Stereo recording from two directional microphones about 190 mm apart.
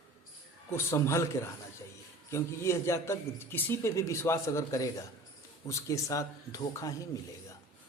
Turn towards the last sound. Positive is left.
turn(degrees=15)  # may be behind; listen again after turning